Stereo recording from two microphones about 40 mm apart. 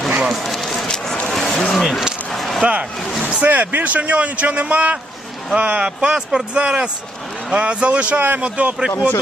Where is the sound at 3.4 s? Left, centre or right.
Right.